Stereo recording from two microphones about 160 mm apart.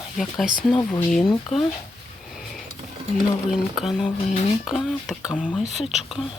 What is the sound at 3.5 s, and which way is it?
Speech, centre (ahead or behind).